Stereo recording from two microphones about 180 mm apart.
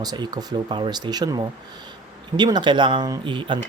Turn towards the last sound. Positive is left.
turn(degrees=-25)  # may be behind; listen again after turning